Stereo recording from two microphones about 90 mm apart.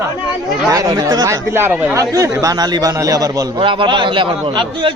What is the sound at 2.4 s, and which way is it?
Speech, 50° right (ahead or behind).